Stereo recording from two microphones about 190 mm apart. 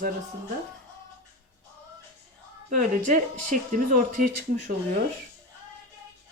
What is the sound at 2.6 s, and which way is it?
Speech, 45° right (ahead or behind).